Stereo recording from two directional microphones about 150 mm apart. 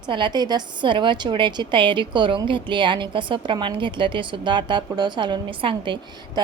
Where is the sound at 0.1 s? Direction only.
30° right (ahead or behind).